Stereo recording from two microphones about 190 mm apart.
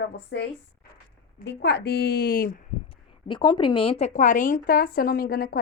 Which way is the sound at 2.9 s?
25° left (ahead or behind).